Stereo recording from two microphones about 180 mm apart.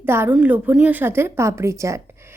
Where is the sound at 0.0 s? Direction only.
10° right (ahead or behind).